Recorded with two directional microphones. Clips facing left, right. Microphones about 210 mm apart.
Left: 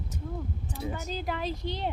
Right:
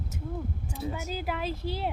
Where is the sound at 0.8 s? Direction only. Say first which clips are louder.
Right 1 dB; centre (ahead or behind).